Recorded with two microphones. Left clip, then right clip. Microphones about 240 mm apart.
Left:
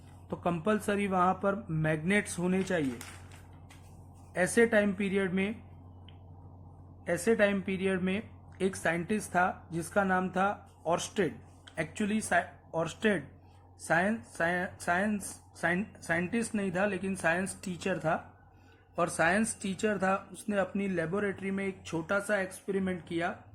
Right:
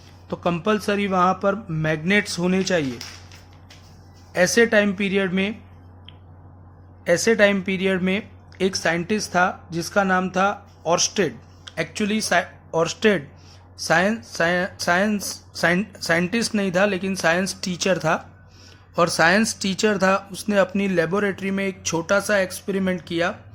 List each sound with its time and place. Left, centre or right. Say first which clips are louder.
0.3 s speech: right 9 dB; right
4.4 s speech: right 9 dB; right
7.0 s speech: right 10 dB; right